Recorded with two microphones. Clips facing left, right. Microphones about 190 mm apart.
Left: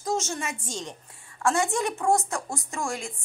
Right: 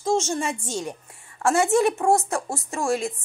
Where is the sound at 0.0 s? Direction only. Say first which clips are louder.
Right 6 dB; 30° right (ahead or behind).